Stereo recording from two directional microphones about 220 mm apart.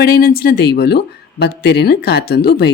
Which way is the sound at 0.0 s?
45° left (ahead or behind).